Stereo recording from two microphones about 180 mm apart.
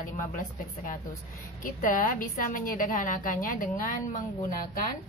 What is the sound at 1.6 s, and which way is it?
A woman's voice, 50° left (ahead or behind).